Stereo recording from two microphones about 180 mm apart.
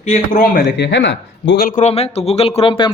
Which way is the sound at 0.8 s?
80° left.